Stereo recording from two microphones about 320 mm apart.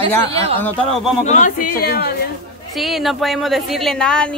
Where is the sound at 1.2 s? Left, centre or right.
Left.